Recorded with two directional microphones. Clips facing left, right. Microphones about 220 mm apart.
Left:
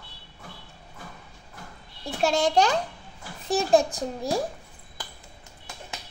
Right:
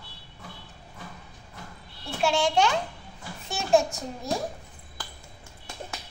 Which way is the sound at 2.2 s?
40° left (ahead or behind).